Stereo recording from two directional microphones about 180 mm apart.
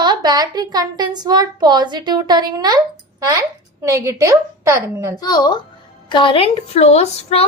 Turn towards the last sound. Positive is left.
turn(degrees=35)  # may be behind; listen again after turning